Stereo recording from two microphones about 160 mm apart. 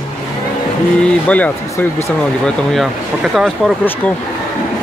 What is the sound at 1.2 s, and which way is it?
Speech, 10° left (ahead or behind).